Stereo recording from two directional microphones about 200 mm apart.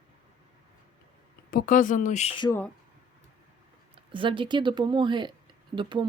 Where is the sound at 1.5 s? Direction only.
45° left (ahead or behind).